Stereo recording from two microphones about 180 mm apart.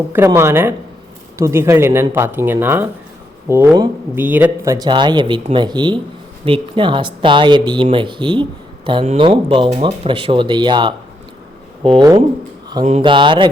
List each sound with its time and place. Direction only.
0.1 s speech: 15° right (ahead or behind)